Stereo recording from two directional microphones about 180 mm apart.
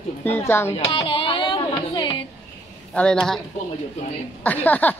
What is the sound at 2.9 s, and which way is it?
Speech, 5° left (ahead or behind).